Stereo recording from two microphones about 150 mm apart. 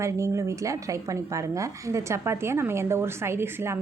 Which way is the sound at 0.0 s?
20° right (ahead or behind).